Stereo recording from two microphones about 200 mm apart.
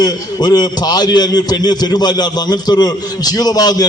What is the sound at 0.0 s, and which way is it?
A man's voice, 20° left (ahead or behind).